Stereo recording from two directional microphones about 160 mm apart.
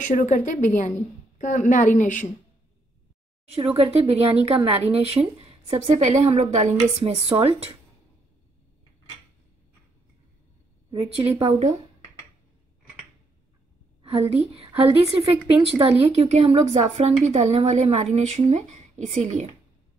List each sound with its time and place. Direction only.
0.0 s a woman's voice: 50° left (ahead or behind)
3.4 s speech: 35° right (ahead or behind)
11.2 s speech: 25° right (ahead or behind)
14.3 s speech: 40° right (ahead or behind)